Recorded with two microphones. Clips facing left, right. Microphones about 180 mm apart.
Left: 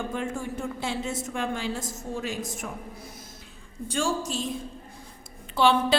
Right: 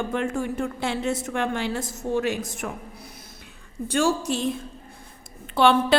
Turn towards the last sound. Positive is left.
turn(degrees=-60)  # may be behind; listen again after turning